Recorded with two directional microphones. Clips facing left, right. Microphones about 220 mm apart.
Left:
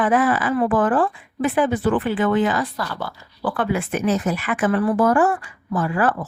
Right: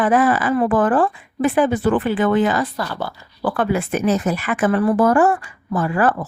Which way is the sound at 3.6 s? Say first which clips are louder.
Right 3 dB; 40° right (ahead or behind).